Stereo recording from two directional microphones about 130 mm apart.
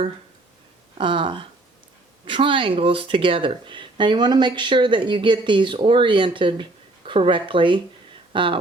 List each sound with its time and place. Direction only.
0.9 s speech: 40° right (ahead or behind)